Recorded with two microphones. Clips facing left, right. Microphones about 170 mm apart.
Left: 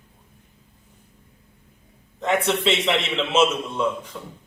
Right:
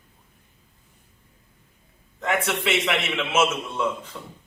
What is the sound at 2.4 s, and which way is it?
A man's voice, 20° left (ahead or behind).